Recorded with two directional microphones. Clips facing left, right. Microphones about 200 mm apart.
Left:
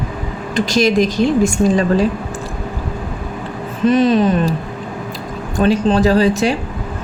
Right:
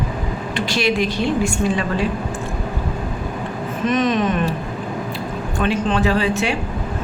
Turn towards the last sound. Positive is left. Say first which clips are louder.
# left 6 dB
turn(degrees=40)  # may be behind; listen again after turning